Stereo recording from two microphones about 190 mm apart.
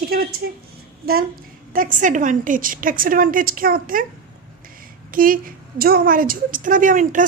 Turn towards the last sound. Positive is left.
turn(degrees=-45)  # may be behind; listen again after turning